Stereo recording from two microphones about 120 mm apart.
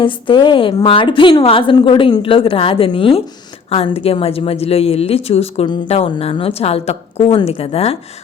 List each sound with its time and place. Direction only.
0.0 s a woman's voice: 45° left (ahead or behind)
5.6 s a woman's voice: 40° left (ahead or behind)
5.9 s a woman's voice: 55° left (ahead or behind)